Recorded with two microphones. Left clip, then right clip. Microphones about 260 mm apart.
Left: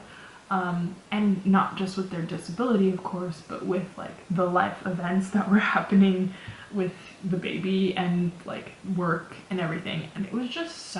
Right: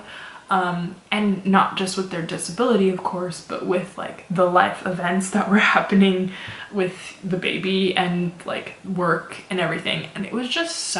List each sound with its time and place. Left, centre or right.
0.5 s speech: centre
3.0 s speech: left
3.2 s speech: centre